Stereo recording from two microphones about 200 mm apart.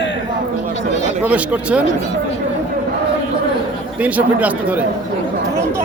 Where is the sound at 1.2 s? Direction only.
5° right (ahead or behind).